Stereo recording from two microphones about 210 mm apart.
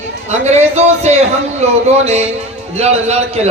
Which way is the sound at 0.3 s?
30° right (ahead or behind).